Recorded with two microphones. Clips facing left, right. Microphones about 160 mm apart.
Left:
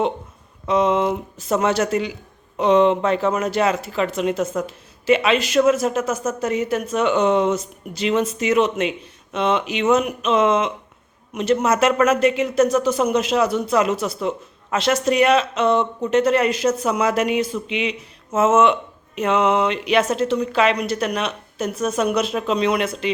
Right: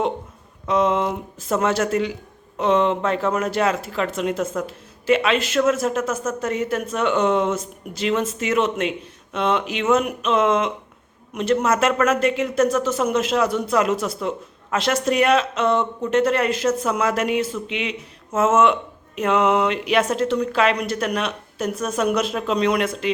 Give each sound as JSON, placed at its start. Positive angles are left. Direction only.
{"t": 0.6, "sound": "a man's voice", "side_deg": 5}